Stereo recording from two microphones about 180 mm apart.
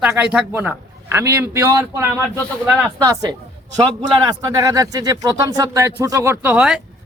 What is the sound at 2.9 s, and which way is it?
A man's voice, 20° right (ahead or behind).